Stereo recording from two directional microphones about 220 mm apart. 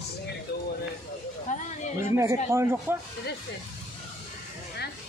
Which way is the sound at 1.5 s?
35° left (ahead or behind).